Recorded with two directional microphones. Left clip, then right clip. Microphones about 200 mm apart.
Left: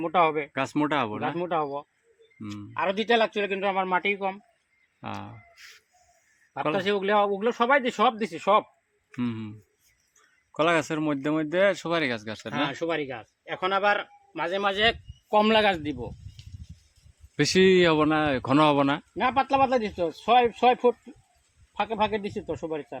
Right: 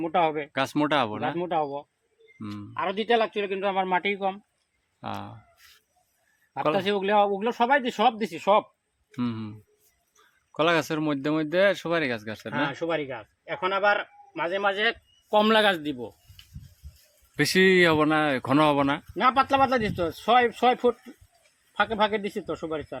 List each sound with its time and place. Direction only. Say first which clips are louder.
0.0 s speech: left 1 dB; 10° left (ahead or behind)
2.4 s speech: right 1 dB; 5° right (ahead or behind)
2.7 s a man's voice: left 1 dB; 30° left (ahead or behind)
3.8 s a man's voice: right 1 dB; 5° right (ahead or behind)
4.9 s speech: right 2 dB; 5° left (ahead or behind)
6.5 s speech: right 1 dB; 5° right (ahead or behind)
12.5 s a man's voice: even; 55° left (ahead or behind)
15.3 s speech: even; 10° left (ahead or behind)
17.3 s speech: even; 10° left (ahead or behind)
19.1 s speech: right 3 dB; 5° right (ahead or behind)